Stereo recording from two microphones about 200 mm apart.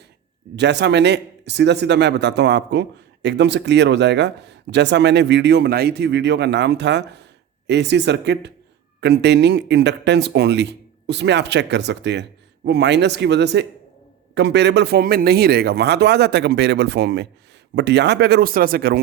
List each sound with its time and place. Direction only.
0.5 s a man's voice: 60° right (ahead or behind)